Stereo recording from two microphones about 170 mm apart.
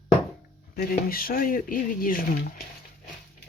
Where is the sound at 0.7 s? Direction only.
60° left (ahead or behind).